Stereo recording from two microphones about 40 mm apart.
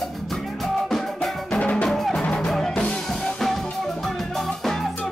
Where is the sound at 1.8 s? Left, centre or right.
Centre.